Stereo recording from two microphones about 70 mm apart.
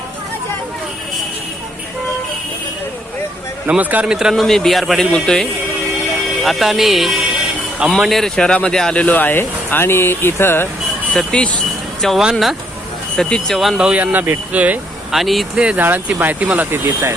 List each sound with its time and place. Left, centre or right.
3.7 s speech: right
4.0 s speech: centre
4.4 s speech: centre
6.4 s speech: centre
8.4 s speech: centre; by 10.7 s left
11.1 s speech: centre
12.2 s speech: centre
13.1 s speech: centre
14.0 s speech: right
15.1 s speech: centre
15.5 s speech: centre
15.8 s speech: right